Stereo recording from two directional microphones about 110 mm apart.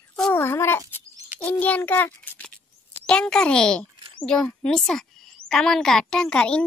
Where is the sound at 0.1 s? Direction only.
15° left (ahead or behind).